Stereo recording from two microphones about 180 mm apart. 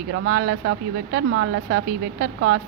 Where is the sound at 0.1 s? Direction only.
65° right (ahead or behind).